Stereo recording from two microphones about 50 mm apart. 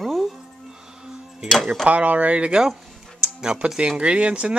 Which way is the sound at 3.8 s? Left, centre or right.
Right.